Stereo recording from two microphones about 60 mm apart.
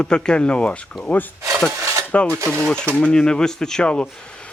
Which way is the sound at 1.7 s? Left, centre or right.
Right.